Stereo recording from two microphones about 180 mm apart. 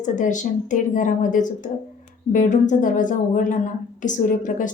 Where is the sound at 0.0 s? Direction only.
45° left (ahead or behind).